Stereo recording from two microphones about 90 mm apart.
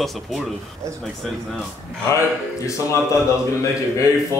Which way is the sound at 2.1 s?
30° left (ahead or behind).